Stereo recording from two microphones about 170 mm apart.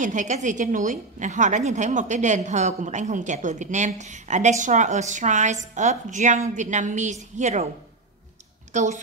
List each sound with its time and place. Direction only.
0.0 s a woman's voice: 45° right (ahead or behind)
8.7 s a woman's voice: 45° right (ahead or behind)